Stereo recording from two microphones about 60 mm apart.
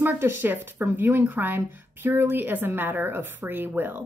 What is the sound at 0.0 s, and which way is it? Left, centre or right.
A woman's voice, right.